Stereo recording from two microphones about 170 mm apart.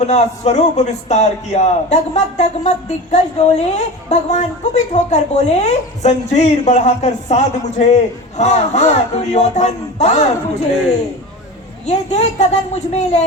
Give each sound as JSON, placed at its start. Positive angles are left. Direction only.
{"t": 0.0, "sound": "a man's voice", "side_deg": 40}
{"t": 11.9, "sound": "a man's voice", "side_deg": 40}